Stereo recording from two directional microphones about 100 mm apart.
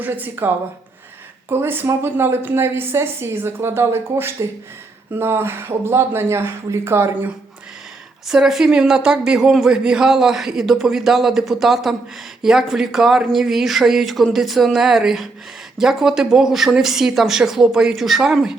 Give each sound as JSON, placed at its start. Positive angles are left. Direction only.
{"t": 0.0, "sound": "a woman's voice", "side_deg": -20}
{"t": 8.3, "sound": "speech", "side_deg": -5}